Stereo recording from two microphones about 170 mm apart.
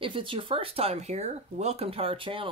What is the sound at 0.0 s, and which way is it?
Speech, 30° right (ahead or behind).